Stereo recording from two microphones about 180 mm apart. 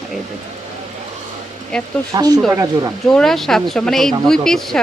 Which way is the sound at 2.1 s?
20° right (ahead or behind).